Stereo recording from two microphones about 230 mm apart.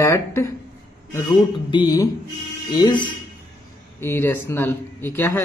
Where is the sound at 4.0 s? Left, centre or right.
Centre.